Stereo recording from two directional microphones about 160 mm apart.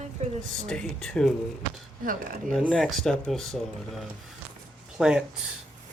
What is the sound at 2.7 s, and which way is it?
Speech, centre (ahead or behind).